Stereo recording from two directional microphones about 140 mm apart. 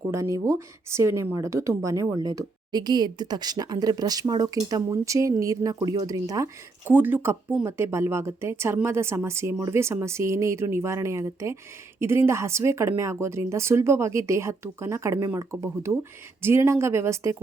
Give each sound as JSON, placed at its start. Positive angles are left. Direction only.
{"t": 0.1, "sound": "speech", "side_deg": -20}